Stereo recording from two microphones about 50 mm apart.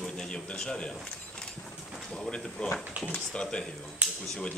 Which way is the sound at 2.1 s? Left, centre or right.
Centre.